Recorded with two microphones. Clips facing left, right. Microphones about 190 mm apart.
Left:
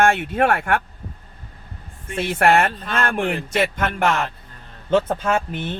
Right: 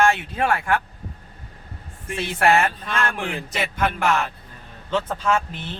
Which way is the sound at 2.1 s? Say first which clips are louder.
Left 2 dB; 55° left (ahead or behind).